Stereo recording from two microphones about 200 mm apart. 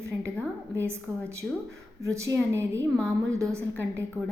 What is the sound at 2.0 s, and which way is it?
A woman's voice, 15° right (ahead or behind).